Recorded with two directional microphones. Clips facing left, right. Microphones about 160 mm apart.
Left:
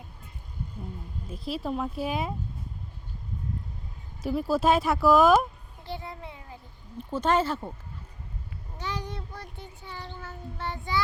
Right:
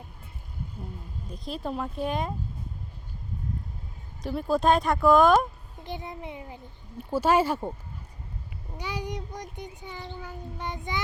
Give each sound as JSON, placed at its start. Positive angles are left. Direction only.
{"t": 1.3, "sound": "speech", "side_deg": 5}
{"t": 4.2, "sound": "speech", "side_deg": 5}
{"t": 5.8, "sound": "a child's voice", "side_deg": -20}
{"t": 8.8, "sound": "a child's voice", "side_deg": -10}